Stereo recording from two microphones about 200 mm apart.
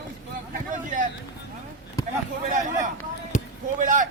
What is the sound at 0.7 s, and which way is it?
Vehicle, 40° right (ahead or behind).